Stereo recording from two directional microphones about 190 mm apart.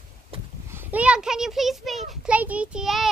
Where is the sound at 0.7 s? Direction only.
10° right (ahead or behind).